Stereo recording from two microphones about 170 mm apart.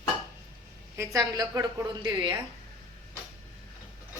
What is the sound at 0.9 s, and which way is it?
A woman's voice, 20° right (ahead or behind).